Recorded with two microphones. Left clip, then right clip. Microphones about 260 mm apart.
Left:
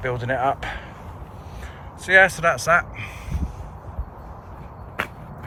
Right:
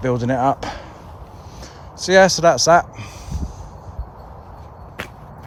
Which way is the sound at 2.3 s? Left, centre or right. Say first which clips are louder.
Right 6 dB; centre.